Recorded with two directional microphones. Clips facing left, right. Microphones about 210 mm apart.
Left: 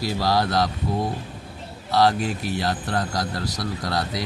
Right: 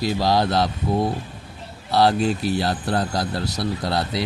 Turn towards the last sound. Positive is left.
turn(degrees=-30)  # may be behind; listen again after turning